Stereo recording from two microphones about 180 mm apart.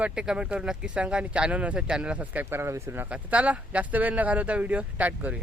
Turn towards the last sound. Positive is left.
turn(degrees=-10)  # may be behind; listen again after turning